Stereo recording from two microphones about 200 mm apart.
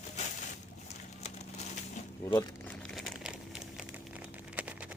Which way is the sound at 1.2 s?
35° left (ahead or behind).